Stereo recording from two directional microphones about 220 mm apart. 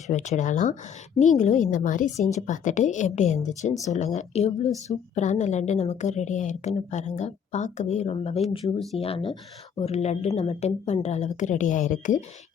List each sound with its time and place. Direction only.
0.1 s a woman's voice: 35° left (ahead or behind)